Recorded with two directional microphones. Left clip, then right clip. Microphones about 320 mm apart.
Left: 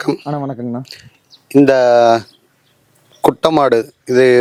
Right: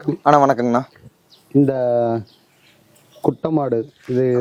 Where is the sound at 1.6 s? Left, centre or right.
Centre.